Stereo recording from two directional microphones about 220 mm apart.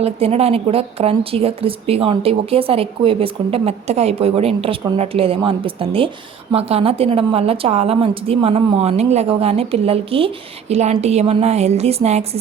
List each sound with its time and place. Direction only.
0.0 s a woman's voice: 25° right (ahead or behind)